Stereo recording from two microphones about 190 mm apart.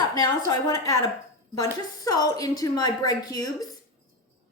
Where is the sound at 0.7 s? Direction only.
15° left (ahead or behind).